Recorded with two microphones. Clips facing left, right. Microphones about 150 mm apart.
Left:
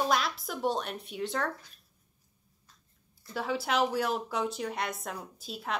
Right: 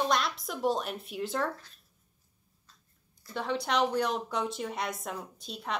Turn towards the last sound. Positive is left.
turn(degrees=0)  # may be behind; listen again after turning